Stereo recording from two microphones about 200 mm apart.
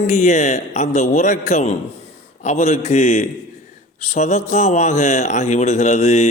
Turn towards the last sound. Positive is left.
turn(degrees=35)  # may be behind; listen again after turning